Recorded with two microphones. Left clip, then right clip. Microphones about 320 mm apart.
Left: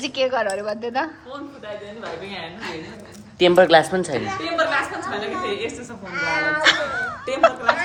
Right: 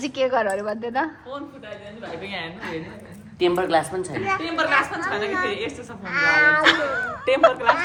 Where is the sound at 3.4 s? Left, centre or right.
Left.